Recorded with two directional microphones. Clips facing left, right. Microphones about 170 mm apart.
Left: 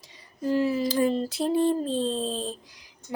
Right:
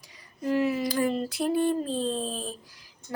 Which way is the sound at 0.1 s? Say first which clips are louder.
Left 1 dB; 30° left (ahead or behind).